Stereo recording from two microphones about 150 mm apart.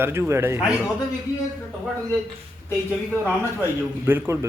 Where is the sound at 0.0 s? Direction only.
15° right (ahead or behind).